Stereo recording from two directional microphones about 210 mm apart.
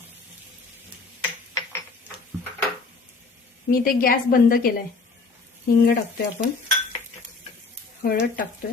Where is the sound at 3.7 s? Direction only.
40° left (ahead or behind).